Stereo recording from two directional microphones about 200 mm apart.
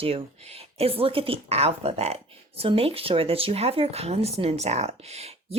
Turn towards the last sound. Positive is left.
turn(degrees=-30)  # may be behind; listen again after turning